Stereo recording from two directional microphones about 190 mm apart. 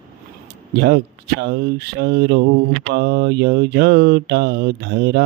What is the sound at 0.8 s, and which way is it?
Mantra, 60° right (ahead or behind).